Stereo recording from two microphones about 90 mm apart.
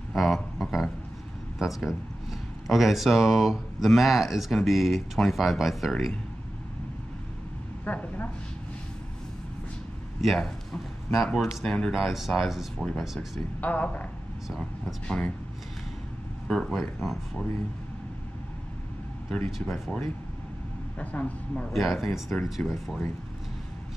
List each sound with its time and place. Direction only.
0.1 s a sound: centre (ahead or behind)
1.6 s speech: 5° right (ahead or behind)
7.8 s a sound: 20° left (ahead or behind)
10.2 s speech: 5° left (ahead or behind)
13.6 s speech: 15° left (ahead or behind)
15.0 s speech: 15° left (ahead or behind)
16.4 s speech: 5° left (ahead or behind)
19.6 s speech: 5° left (ahead or behind)
21.0 s speech: 15° left (ahead or behind)
21.7 s speech: centre (ahead or behind)